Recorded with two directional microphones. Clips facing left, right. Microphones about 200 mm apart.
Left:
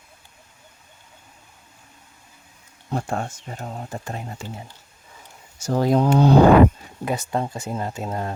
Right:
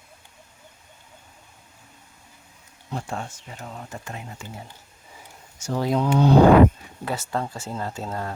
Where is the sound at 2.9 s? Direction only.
50° left (ahead or behind).